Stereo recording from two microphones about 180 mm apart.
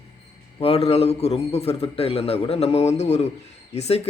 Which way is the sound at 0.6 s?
35° left (ahead or behind).